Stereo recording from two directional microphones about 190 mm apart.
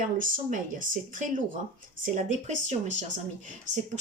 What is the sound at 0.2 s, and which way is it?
Speech, 45° right (ahead or behind).